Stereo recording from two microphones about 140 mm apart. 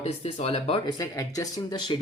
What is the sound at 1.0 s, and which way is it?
Speech, 25° left (ahead or behind).